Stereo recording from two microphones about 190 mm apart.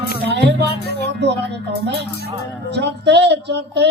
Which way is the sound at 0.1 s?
60° right (ahead or behind).